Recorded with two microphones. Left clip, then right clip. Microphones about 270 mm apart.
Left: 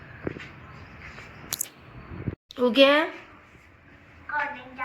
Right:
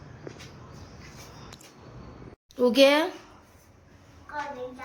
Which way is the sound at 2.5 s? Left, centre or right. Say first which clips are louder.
Left 1 dB; centre.